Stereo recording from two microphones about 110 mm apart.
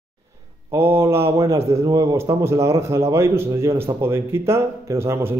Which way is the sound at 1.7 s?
30° right (ahead or behind).